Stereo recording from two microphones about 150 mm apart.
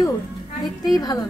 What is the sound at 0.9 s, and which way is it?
Speech, 25° left (ahead or behind).